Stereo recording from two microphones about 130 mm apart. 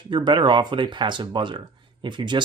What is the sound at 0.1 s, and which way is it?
Speech, 40° right (ahead or behind).